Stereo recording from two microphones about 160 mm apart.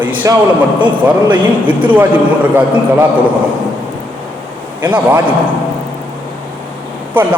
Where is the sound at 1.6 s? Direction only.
10° right (ahead or behind).